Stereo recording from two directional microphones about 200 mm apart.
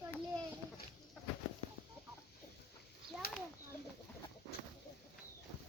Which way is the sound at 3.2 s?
50° left (ahead or behind).